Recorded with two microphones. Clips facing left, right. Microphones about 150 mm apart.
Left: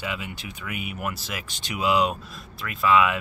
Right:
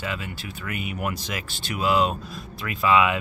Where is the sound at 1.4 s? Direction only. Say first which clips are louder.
Even; 15° left (ahead or behind).